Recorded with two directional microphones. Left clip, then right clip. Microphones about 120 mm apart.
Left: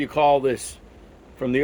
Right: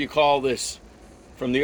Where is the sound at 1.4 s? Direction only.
70° left (ahead or behind).